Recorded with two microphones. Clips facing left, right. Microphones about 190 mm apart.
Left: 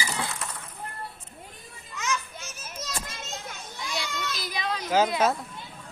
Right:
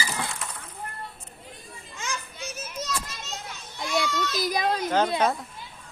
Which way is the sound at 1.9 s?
30° right (ahead or behind).